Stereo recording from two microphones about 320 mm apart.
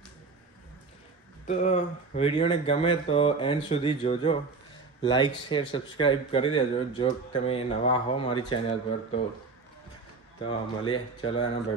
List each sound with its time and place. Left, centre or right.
1.5 s speech: left
10.8 s speech: centre